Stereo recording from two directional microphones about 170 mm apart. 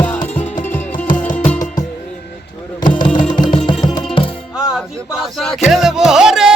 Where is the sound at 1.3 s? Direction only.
45° left (ahead or behind).